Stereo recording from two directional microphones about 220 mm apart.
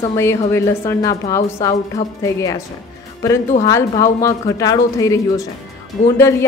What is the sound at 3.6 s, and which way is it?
A woman's voice, 15° left (ahead or behind).